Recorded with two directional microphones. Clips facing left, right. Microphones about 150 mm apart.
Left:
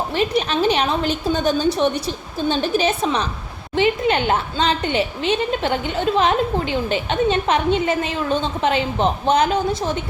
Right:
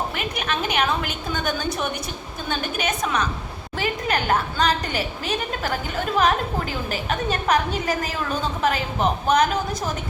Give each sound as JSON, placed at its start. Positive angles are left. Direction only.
{"t": 0.1, "sound": "a woman's voice", "side_deg": 30}